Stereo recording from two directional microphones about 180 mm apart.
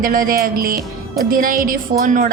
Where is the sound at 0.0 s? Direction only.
50° right (ahead or behind).